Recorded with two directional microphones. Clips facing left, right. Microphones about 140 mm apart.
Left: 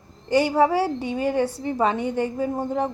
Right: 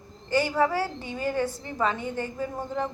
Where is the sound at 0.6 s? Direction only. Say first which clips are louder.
Left 5 dB; 30° left (ahead or behind).